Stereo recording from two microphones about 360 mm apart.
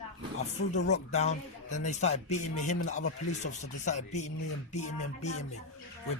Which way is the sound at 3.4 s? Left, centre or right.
Centre.